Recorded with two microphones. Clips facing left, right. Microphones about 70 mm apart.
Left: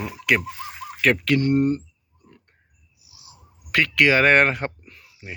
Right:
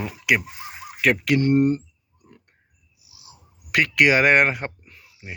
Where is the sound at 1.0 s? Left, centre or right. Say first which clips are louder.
Even; centre.